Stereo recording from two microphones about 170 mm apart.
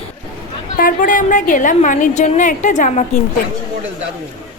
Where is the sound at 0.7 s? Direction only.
55° left (ahead or behind).